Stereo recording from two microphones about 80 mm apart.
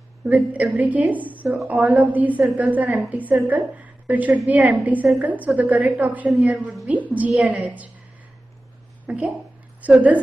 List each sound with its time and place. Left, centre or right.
0.2 s a woman's voice: centre
9.0 s a woman's voice: centre